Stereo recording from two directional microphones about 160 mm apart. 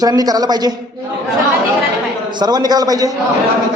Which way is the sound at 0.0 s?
25° right (ahead or behind).